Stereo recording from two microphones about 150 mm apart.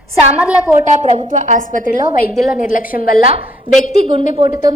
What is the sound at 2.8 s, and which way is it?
Speech, 70° left (ahead or behind).